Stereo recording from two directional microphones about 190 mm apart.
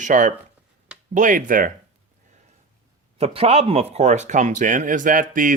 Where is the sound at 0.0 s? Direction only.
40° right (ahead or behind).